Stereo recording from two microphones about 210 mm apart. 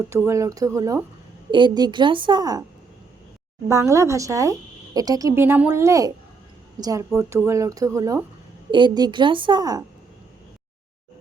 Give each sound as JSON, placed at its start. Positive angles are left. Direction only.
{"t": 0.1, "sound": "a woman's voice", "side_deg": -15}
{"t": 3.7, "sound": "a woman's voice", "side_deg": -15}